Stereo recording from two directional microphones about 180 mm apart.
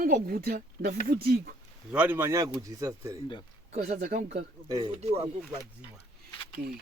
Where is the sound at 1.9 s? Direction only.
10° right (ahead or behind).